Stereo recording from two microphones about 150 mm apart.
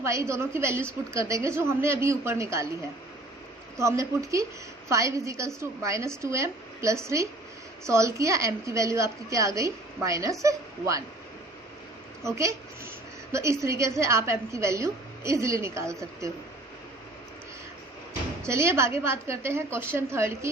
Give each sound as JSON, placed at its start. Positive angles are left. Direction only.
{"t": 0.0, "sound": "a woman's voice", "side_deg": -20}
{"t": 3.8, "sound": "a woman's voice", "side_deg": -20}
{"t": 12.2, "sound": "a woman's voice", "side_deg": -20}
{"t": 18.4, "sound": "a woman's voice", "side_deg": -15}